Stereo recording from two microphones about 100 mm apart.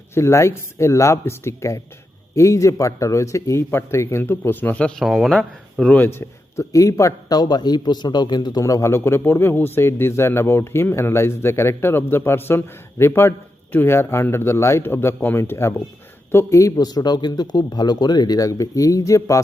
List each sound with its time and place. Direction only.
0.1 s a man's voice: 30° left (ahead or behind); by 5.0 s 10° left (ahead or behind)
5.0 s speech: centre (ahead or behind)
5.8 s speech: 10° left (ahead or behind)
6.1 s a man's voice: 30° left (ahead or behind)